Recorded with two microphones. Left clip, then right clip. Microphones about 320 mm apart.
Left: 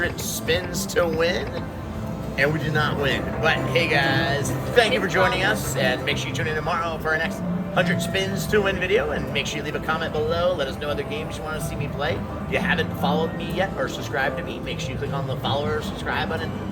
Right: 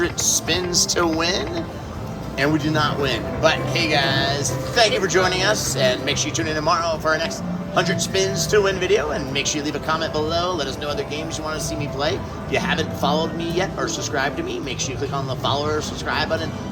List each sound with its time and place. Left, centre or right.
0.0 s a man's voice: centre
2.4 s a man's voice: centre
15.4 s speech: centre